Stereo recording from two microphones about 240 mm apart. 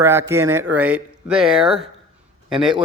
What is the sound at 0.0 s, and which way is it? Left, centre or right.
Speech, centre.